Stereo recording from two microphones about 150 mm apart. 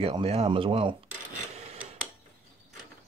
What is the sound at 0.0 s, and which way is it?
Speech, 40° right (ahead or behind).